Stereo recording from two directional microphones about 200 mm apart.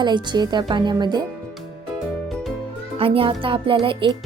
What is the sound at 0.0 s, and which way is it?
Music, 20° right (ahead or behind).